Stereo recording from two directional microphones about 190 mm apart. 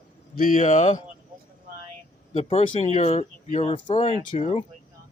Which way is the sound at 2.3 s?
30° left (ahead or behind).